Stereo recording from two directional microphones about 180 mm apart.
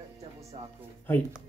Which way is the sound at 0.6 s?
30° right (ahead or behind).